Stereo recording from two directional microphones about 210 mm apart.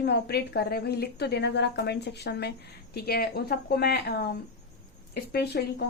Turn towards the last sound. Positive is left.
turn(degrees=50)  # may be behind; listen again after turning